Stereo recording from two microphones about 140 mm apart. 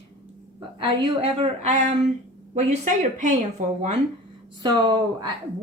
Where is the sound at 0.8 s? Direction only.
40° right (ahead or behind).